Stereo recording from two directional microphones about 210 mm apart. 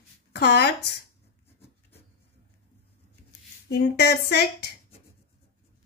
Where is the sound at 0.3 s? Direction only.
50° left (ahead or behind).